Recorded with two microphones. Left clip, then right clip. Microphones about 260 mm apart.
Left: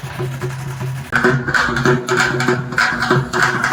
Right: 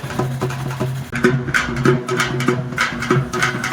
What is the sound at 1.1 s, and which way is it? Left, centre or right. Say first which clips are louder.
Music: left 3 dB; centre.